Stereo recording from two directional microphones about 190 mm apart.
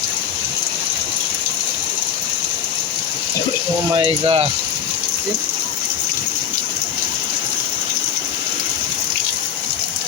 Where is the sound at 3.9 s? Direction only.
30° right (ahead or behind).